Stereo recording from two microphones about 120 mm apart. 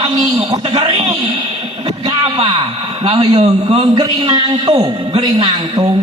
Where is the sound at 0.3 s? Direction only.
45° right (ahead or behind).